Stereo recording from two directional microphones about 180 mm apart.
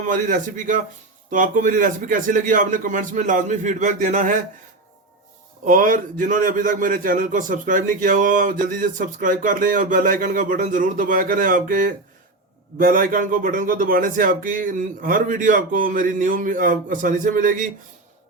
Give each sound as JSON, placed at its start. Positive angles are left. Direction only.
{"t": 0.1, "sound": "a man's voice", "side_deg": -45}
{"t": 5.6, "sound": "a man's voice", "side_deg": -50}